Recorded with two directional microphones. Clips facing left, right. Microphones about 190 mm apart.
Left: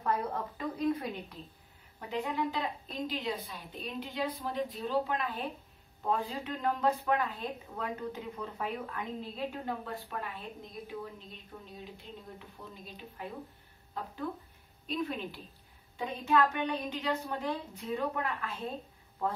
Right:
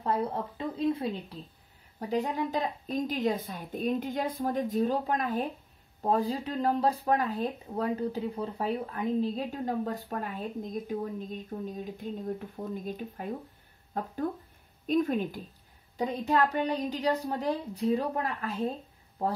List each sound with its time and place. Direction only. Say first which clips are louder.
0.0 s a woman's voice: right 3 dB; 30° right (ahead or behind)
2.0 s speech: right 4 dB; 40° right (ahead or behind)